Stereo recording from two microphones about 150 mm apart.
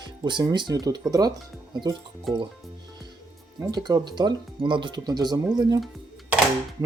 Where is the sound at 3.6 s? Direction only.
25° right (ahead or behind).